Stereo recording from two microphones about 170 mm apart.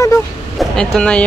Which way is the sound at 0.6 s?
Centre (ahead or behind).